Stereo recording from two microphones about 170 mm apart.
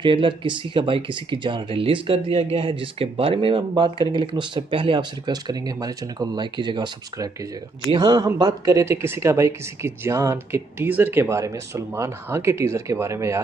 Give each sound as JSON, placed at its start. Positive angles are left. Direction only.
{"t": 0.0, "sound": "speech", "side_deg": -30}